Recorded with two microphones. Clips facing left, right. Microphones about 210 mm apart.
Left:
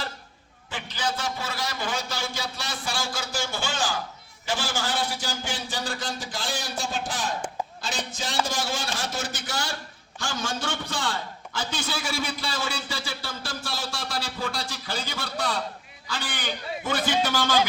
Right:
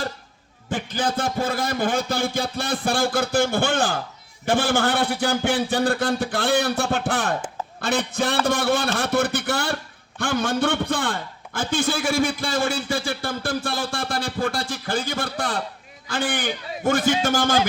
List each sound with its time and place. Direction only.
0.7 s a man's voice: 50° right (ahead or behind)